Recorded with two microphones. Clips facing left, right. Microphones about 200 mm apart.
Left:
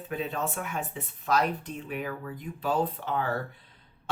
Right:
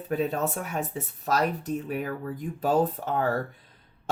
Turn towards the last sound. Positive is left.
turn(degrees=-45)  # may be behind; listen again after turning